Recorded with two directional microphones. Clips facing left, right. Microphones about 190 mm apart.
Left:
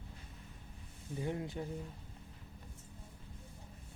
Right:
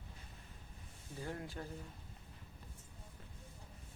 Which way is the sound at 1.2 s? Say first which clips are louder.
Left 5 dB; 20° left (ahead or behind).